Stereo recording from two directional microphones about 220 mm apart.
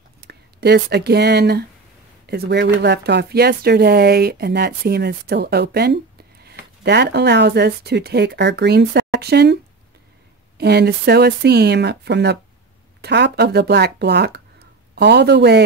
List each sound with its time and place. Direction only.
0.2 s speech: 45° right (ahead or behind)
10.6 s speech: 45° right (ahead or behind)